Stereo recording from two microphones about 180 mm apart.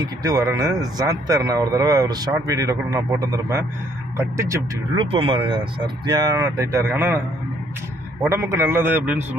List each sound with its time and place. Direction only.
0.0 s a man's voice: 20° right (ahead or behind)
5.1 s speech: 30° right (ahead or behind); by 7.2 s 15° right (ahead or behind)
8.3 s a man's voice: 15° right (ahead or behind)